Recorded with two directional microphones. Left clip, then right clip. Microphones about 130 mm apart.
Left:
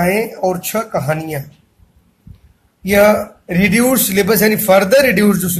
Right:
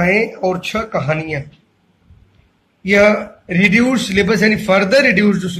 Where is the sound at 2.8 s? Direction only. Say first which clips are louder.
Left 1 dB; 75° left (ahead or behind).